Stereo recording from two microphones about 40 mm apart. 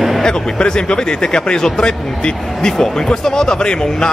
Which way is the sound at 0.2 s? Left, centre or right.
Centre.